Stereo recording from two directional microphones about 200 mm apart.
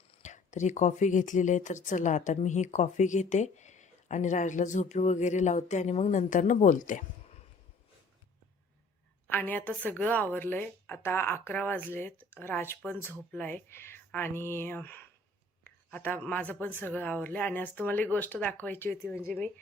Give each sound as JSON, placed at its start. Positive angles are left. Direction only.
{"t": 0.1, "sound": "speech", "side_deg": 35}
{"t": 9.3, "sound": "a woman's voice", "side_deg": 10}